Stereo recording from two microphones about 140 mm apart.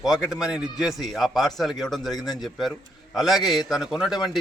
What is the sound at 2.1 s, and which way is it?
Speech, 30° left (ahead or behind).